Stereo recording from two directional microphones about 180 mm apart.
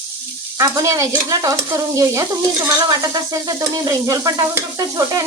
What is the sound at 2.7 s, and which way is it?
Frying, 20° right (ahead or behind).